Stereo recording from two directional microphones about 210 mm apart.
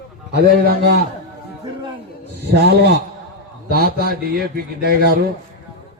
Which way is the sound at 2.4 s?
50° right (ahead or behind).